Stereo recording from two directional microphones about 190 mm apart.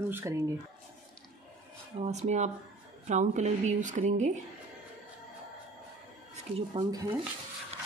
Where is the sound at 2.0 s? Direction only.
35° right (ahead or behind).